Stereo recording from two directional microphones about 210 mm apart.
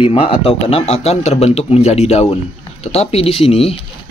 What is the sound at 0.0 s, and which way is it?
Speech, 25° left (ahead or behind).